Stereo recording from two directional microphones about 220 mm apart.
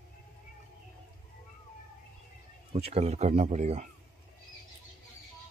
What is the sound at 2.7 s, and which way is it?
Speech, 30° right (ahead or behind).